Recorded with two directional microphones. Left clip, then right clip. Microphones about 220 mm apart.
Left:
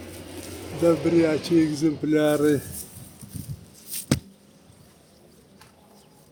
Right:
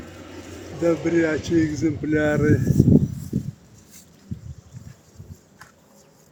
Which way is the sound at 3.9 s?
50° left (ahead or behind).